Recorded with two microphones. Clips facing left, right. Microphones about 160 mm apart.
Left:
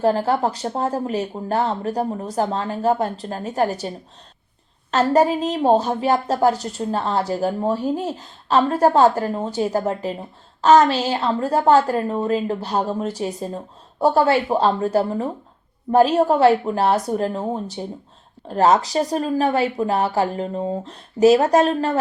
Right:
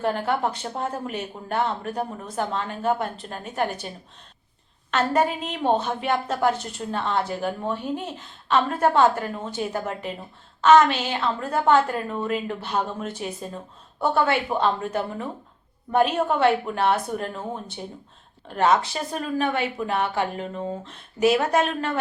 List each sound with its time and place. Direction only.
0.0 s a woman's voice: 35° left (ahead or behind)